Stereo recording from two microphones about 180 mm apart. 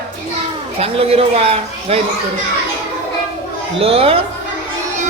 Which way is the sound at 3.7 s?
30° right (ahead or behind).